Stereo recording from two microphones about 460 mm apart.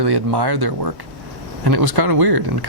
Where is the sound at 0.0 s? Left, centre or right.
Right.